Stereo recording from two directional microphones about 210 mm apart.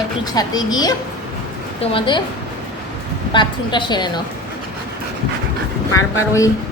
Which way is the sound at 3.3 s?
20° left (ahead or behind).